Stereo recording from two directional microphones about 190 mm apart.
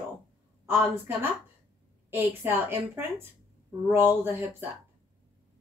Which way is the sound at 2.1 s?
10° right (ahead or behind).